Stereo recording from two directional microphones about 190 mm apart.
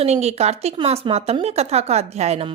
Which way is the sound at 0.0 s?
35° right (ahead or behind).